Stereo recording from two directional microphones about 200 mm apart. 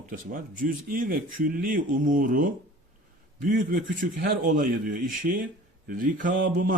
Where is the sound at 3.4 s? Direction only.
40° right (ahead or behind).